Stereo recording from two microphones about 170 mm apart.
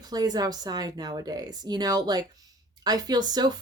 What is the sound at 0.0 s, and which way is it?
Speech, 25° right (ahead or behind).